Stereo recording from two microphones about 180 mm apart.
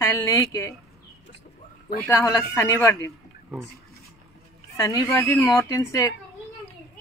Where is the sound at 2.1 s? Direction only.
20° left (ahead or behind).